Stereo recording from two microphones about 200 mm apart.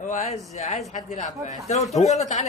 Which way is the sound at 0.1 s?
35° left (ahead or behind).